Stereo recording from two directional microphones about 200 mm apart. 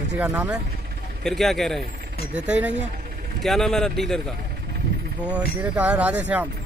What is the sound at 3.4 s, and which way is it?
Speech, centre (ahead or behind).